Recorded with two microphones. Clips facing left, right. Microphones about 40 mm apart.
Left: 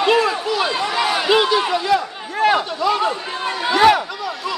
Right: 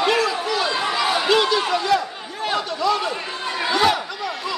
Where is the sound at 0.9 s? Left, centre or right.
Left.